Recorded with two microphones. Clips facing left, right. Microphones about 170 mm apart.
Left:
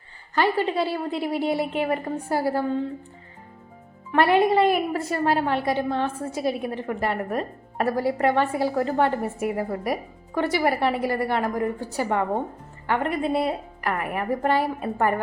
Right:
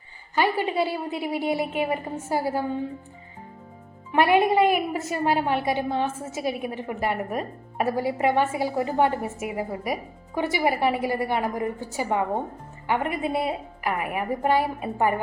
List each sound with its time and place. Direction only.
0.3 s a woman's voice: 10° right (ahead or behind)
4.1 s a woman's voice: 15° right (ahead or behind)
8.7 s a woman's voice: 15° right (ahead or behind)
9.0 s a woman's voice: 5° right (ahead or behind)